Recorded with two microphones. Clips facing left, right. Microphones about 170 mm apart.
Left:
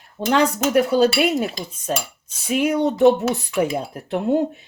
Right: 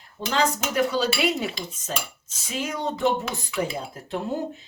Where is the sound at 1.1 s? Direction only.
50° left (ahead or behind).